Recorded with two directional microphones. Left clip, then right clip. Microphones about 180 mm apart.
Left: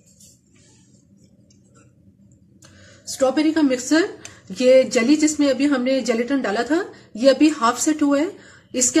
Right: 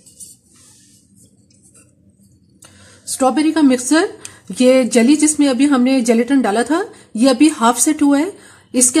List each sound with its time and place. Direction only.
3.1 s speech: 65° right (ahead or behind)